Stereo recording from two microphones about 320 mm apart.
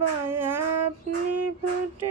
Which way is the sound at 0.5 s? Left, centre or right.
Right.